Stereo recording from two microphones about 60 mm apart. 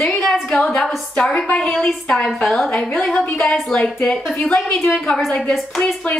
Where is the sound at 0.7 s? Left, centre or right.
Centre.